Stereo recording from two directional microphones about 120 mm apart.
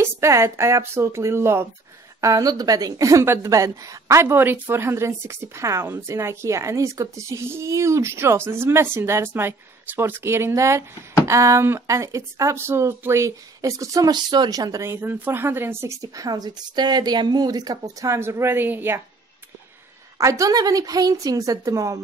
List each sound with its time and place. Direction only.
0.0 s speech: 25° right (ahead or behind)
20.2 s speech: 25° right (ahead or behind)